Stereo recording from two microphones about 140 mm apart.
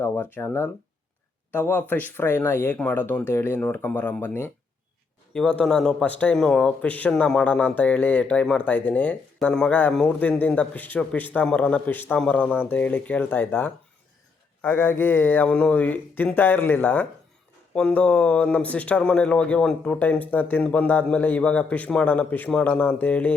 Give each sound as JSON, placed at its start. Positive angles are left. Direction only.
{"t": 0.0, "sound": "a man's voice", "side_deg": 15}